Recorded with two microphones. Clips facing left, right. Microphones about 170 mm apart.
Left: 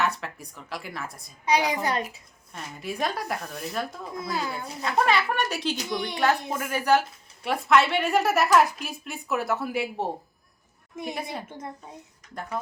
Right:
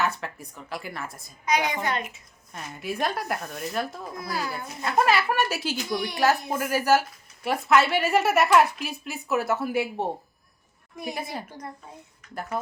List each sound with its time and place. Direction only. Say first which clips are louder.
0.0 s speech: even; centre (ahead or behind)
1.5 s a child's voice: left 1 dB; 35° left (ahead or behind)
2.5 s speech: right 1 dB; centre (ahead or behind)
4.2 s a child's voice: left 1 dB; 25° left (ahead or behind)
4.8 s speech: right 1 dB; 5° right (ahead or behind)
11.4 s a child's voice: left 1 dB; 25° left (ahead or behind)